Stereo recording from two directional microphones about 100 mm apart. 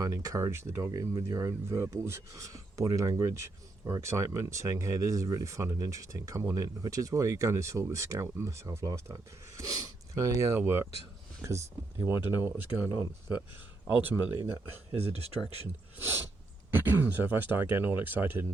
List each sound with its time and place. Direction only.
0.0 s speech: 35° right (ahead or behind)
14.0 s speech: 20° right (ahead or behind)
14.9 s speech: 90° right
16.7 s speech: 20° right (ahead or behind)